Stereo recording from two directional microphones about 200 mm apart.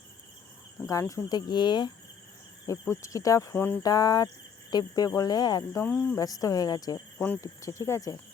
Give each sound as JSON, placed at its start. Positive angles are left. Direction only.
{"t": 0.9, "sound": "speech", "side_deg": 15}